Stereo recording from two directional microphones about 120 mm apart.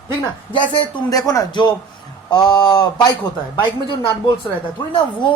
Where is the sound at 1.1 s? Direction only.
30° left (ahead or behind).